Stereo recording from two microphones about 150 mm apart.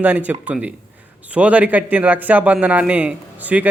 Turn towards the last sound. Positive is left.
turn(degrees=-10)  # may be behind; listen again after turning